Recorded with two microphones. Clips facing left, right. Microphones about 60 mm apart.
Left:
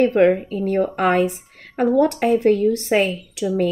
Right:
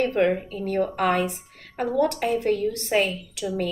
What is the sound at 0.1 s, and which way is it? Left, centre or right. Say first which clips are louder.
A woman's voice: left 6 dB; left.